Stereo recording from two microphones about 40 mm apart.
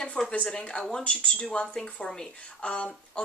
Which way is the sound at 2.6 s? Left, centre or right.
Left.